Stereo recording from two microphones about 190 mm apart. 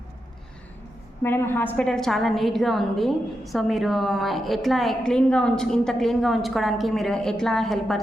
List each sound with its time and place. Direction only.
1.2 s a woman's voice: 10° left (ahead or behind)